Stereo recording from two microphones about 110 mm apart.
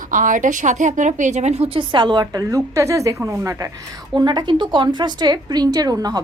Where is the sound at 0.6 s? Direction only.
90° right; by 2.2 s 45° right (ahead or behind).